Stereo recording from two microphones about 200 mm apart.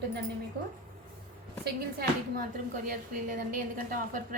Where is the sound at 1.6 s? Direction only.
50° right (ahead or behind).